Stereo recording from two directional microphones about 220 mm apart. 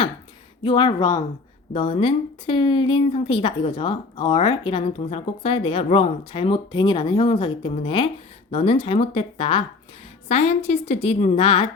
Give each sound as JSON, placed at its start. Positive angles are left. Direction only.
{"t": 0.6, "sound": "a woman's voice", "side_deg": 20}